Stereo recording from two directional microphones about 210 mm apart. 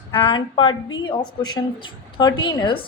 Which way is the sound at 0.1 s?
25° left (ahead or behind).